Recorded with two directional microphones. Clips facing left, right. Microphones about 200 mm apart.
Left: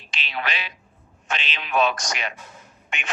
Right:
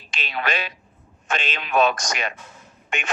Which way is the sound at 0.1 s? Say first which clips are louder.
Right 4 dB; 45° right (ahead or behind).